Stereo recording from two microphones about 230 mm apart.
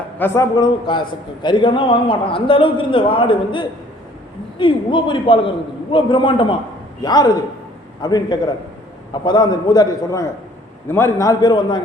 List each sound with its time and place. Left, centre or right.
0.2 s a man's voice: centre